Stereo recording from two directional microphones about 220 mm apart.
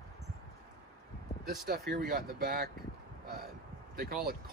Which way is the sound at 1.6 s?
45° right (ahead or behind).